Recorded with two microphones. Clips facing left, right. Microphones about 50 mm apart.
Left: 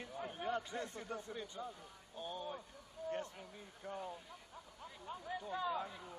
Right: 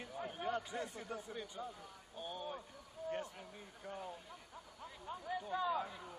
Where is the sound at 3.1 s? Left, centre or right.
Centre.